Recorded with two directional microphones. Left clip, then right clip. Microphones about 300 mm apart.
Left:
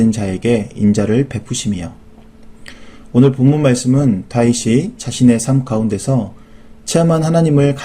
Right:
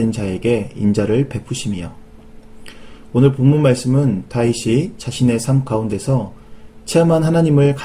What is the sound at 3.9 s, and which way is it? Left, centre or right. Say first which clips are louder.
Speech: left 3 dB; left.